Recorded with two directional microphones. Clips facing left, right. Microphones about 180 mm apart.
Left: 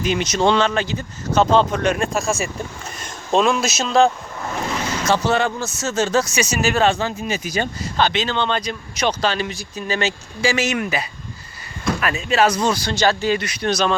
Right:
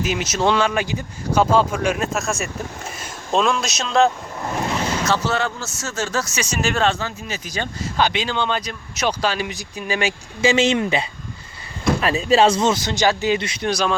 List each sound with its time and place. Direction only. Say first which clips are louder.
0.0 s speech: left 2 dB; 5° right (ahead or behind)
5.0 s speech: left 6 dB; 15° left (ahead or behind)
7.0 s speech: left 5 dB; 15° left (ahead or behind)
7.9 s speech: left 1 dB; 10° right (ahead or behind)
10.5 s speech: right 5 dB; 25° right (ahead or behind)
13.7 s speech: left 2 dB; 10° right (ahead or behind)